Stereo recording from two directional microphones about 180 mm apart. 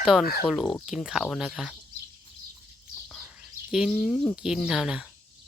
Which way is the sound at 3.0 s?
5° left (ahead or behind).